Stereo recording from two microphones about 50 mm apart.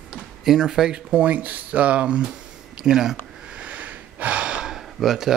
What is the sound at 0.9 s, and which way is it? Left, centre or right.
Speech, right.